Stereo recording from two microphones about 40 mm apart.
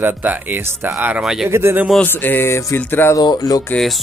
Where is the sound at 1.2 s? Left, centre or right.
Centre.